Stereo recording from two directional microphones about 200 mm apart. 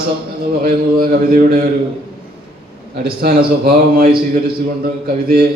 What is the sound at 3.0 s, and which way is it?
A man's voice, 50° right (ahead or behind).